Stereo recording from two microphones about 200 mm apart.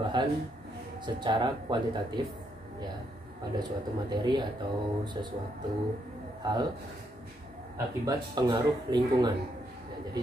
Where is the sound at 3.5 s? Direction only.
20° right (ahead or behind).